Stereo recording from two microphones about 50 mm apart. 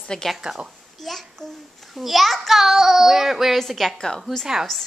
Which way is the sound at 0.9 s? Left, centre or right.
Centre.